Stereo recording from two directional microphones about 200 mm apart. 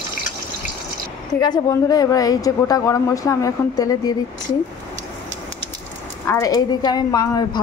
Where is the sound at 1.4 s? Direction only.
20° left (ahead or behind).